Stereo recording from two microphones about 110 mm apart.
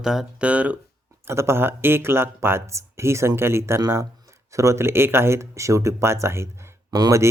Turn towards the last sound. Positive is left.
turn(degrees=-35)  # may be behind; listen again after turning